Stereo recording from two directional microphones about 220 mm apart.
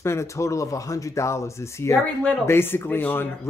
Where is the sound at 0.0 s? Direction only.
10° left (ahead or behind).